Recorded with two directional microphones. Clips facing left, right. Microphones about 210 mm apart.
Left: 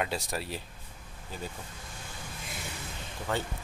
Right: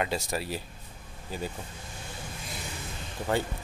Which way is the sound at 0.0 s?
Centre (ahead or behind).